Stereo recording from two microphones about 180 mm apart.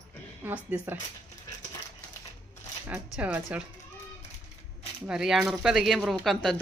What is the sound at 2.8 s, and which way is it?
Speech, 10° right (ahead or behind).